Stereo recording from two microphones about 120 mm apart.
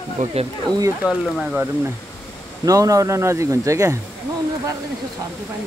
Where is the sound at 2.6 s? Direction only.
30° right (ahead or behind).